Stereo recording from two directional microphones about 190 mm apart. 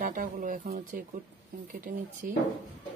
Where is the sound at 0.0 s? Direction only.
45° right (ahead or behind).